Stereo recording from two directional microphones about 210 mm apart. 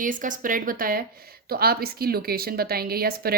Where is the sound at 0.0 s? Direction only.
40° right (ahead or behind).